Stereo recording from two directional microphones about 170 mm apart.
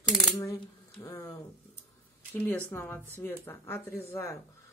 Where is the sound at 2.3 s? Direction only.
10° left (ahead or behind).